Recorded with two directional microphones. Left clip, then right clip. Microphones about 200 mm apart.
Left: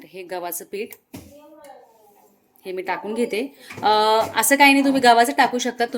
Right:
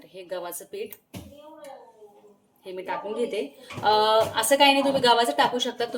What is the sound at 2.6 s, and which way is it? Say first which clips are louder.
Speech: left 5 dB; 55° left (ahead or behind).